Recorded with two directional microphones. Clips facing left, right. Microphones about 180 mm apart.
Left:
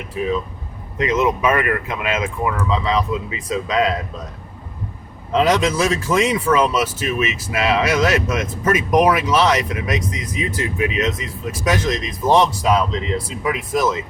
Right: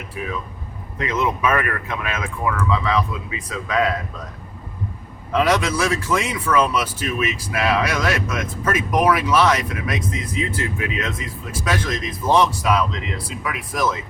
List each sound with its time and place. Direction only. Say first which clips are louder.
0.1 s speech: left 8 dB; 25° left (ahead or behind)
5.3 s speech: left 2 dB; 25° left (ahead or behind)